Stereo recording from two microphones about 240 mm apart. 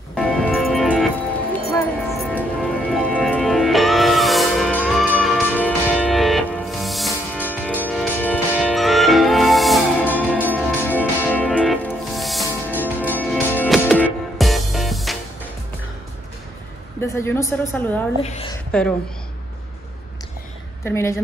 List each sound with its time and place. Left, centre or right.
0.1 s music: centre
17.2 s a woman's voice: centre
18.2 s a woman's voice: left
18.7 s a woman's voice: centre
20.8 s a woman's voice: centre